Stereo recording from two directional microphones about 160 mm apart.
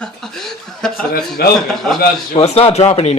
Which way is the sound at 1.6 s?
Centre (ahead or behind).